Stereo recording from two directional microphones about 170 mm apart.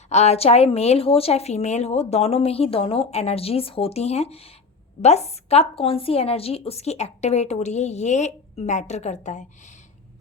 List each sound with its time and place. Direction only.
0.1 s speech: 40° left (ahead or behind)